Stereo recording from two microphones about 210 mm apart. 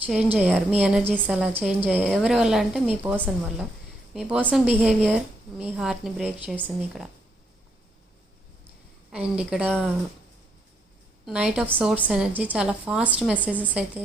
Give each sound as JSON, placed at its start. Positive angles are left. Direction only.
{"t": 0.0, "sound": "a woman's voice", "side_deg": -5}
{"t": 9.1, "sound": "a woman's voice", "side_deg": -5}
{"t": 11.3, "sound": "a woman's voice", "side_deg": -5}